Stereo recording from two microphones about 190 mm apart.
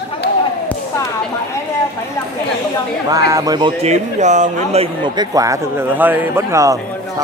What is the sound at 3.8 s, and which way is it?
A man's voice, 35° right (ahead or behind).